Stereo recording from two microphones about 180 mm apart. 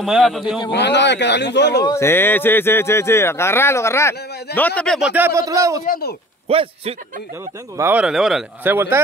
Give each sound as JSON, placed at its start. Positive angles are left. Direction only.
{"t": 0.0, "sound": "a man's voice", "side_deg": 0}
{"t": 0.7, "sound": "speech", "side_deg": 70}
{"t": 1.9, "sound": "a man's voice", "side_deg": 15}
{"t": 5.1, "sound": "speech", "side_deg": -15}
{"t": 5.9, "sound": "speech", "side_deg": 55}
{"t": 6.5, "sound": "a man's voice", "side_deg": -30}
{"t": 7.7, "sound": "speech", "side_deg": -10}
{"t": 8.7, "sound": "speech", "side_deg": -15}